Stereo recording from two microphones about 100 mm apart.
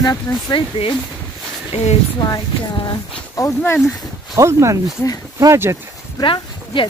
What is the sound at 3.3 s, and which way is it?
Speech, 25° left (ahead or behind).